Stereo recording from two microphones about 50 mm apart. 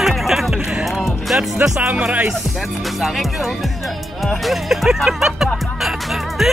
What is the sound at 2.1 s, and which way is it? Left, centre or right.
Speech, right.